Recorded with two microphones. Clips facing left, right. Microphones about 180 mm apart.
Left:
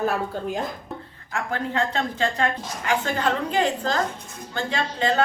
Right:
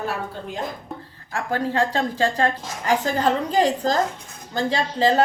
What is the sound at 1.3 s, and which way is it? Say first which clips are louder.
A woman's voice: right 3 dB; 35° right (ahead or behind).